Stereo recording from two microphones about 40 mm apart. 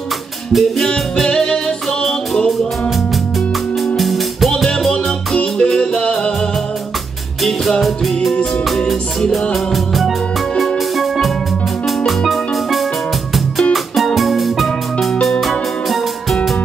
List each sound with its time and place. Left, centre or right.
0.5 s music: centre
3.8 s music: centre
4.9 s music: left
7.8 s music: centre
12.1 s steelpan: centre
13.9 s music: centre